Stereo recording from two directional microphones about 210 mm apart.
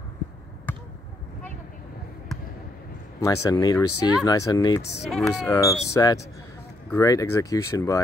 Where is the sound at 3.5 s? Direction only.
15° left (ahead or behind).